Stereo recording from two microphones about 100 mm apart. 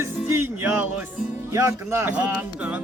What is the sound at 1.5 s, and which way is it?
Music, 30° right (ahead or behind).